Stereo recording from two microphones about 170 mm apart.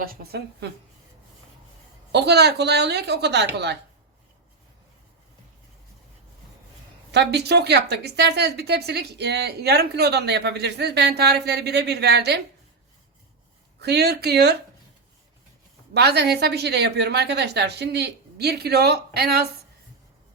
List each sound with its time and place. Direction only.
0.0 s speech: 65° right (ahead or behind)
2.1 s a woman's voice: 75° right (ahead or behind)
7.1 s a woman's voice: 85° right
13.8 s a woman's voice: 75° right (ahead or behind)
16.0 s a woman's voice: 75° right (ahead or behind)